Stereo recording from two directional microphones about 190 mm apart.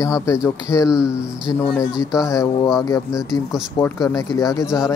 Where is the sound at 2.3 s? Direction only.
20° left (ahead or behind).